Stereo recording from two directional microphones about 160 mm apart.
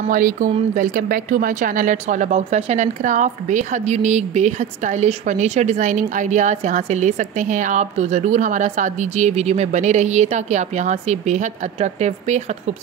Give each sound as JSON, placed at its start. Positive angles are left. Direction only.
{"t": 0.1, "sound": "speech", "side_deg": -60}